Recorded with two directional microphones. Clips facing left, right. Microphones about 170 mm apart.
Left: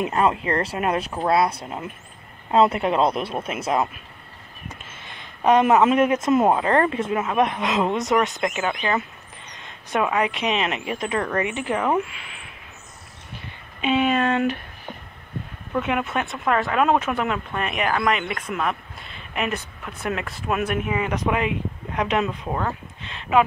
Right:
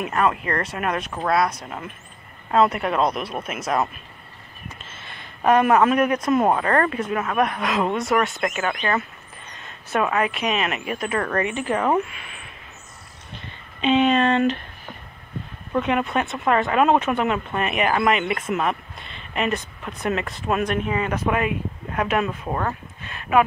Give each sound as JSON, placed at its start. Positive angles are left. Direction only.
{"t": 0.0, "sound": "speech", "side_deg": 25}
{"t": 4.9, "sound": "a man's voice", "side_deg": 15}
{"t": 13.3, "sound": "a sound", "side_deg": 10}
{"t": 15.8, "sound": "a woman's voice", "side_deg": 5}
{"t": 22.5, "sound": "speech", "side_deg": 5}